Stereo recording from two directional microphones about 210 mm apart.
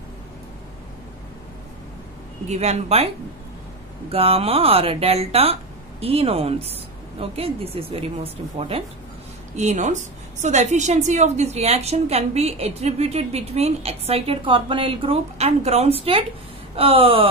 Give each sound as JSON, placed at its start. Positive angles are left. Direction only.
{"t": 2.4, "sound": "speech", "side_deg": -30}
{"t": 4.1, "sound": "a woman's voice", "side_deg": -25}